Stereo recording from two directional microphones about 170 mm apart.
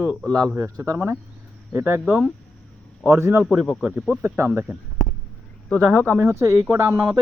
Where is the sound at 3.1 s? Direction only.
15° right (ahead or behind).